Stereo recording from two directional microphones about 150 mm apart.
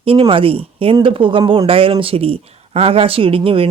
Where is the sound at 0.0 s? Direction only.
40° right (ahead or behind).